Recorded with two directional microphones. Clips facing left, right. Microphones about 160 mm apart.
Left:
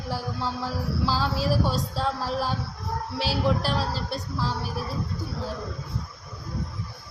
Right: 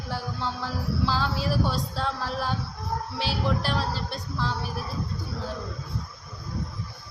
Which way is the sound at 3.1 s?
35° left (ahead or behind).